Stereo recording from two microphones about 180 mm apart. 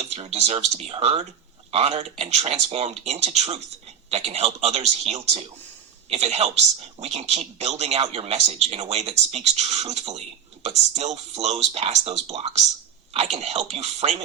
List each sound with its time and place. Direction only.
0.0 s speech: 35° right (ahead or behind)